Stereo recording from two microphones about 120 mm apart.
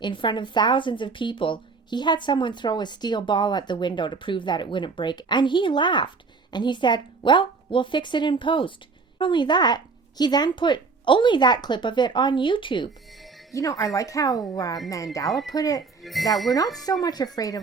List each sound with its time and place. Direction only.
0.0 s a woman's voice: 40° left (ahead or behind)
13.5 s a woman's voice: 30° left (ahead or behind)
16.0 s speech: centre (ahead or behind)
16.8 s a woman's voice: 35° left (ahead or behind)